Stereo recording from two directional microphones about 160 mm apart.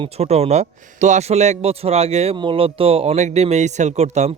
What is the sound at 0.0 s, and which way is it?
Speech, 40° right (ahead or behind).